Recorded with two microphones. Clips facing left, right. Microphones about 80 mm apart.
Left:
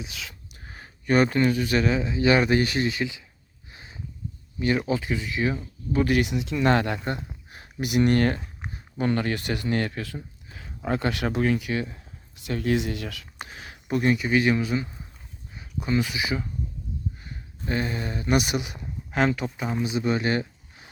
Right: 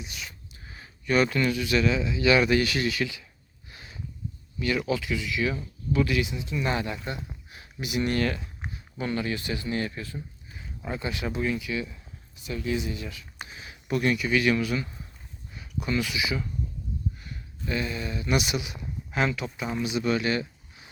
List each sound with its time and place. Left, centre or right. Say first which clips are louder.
0.5 s speech: left 2 dB; left
3.7 s a sound: left 1 dB; left
4.6 s speech: left 3 dB; left
6.1 s speech: left 4 dB; left
12.5 s speech: left 4 dB; left
13.8 s speech: left 2 dB; left
15.5 s a sound: left 3 dB; left
16.0 s speech: left 2 dB; left